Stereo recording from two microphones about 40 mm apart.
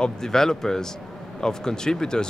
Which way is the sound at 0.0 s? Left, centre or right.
Centre.